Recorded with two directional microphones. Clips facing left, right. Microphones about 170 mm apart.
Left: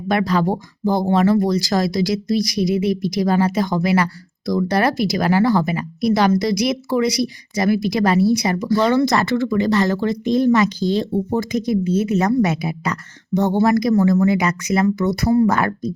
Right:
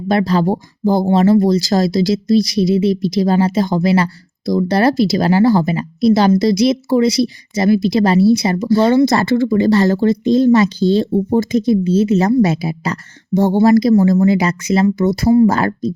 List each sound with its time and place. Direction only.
0.1 s speech: 30° right (ahead or behind)